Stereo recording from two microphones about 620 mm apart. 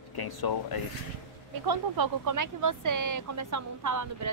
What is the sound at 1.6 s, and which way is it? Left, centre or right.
Speech, right.